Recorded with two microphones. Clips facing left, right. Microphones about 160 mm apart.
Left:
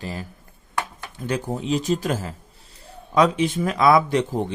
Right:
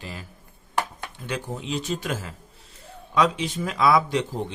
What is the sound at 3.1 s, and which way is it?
Speech, 50° left (ahead or behind).